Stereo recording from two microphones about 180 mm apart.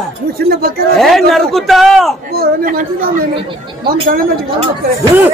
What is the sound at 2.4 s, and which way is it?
Speech, 50° right (ahead or behind).